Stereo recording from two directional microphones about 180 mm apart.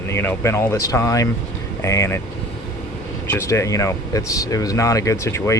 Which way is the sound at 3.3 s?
15° left (ahead or behind).